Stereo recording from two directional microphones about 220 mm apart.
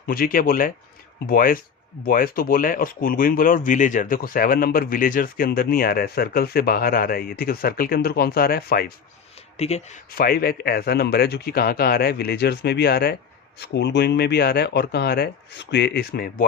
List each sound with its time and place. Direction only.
0.1 s speech: 40° left (ahead or behind)
9.6 s speech: 30° left (ahead or behind)